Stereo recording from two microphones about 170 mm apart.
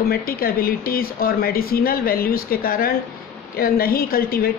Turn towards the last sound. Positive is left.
turn(degrees=60)  # may be behind; listen again after turning